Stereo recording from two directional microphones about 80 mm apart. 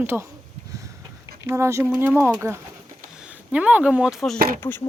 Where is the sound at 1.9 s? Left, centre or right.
Right.